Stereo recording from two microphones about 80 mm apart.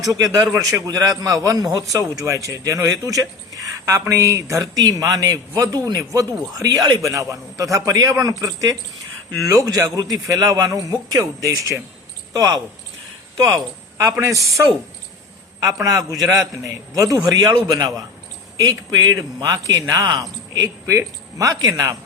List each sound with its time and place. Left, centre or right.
0.0 s a man's voice: right
15.6 s a man's voice: right